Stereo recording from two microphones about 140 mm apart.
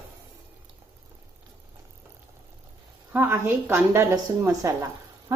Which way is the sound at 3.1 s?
15° right (ahead or behind).